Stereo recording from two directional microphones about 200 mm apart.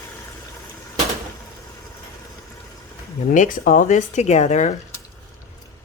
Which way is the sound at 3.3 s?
40° left (ahead or behind).